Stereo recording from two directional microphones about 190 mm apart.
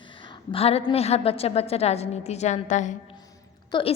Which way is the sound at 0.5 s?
30° left (ahead or behind).